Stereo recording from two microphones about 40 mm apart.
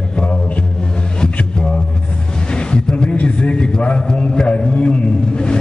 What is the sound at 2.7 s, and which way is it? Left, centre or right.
A man's voice, left.